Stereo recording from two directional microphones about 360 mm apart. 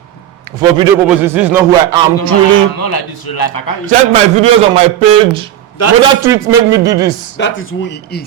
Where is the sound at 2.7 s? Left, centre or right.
Left.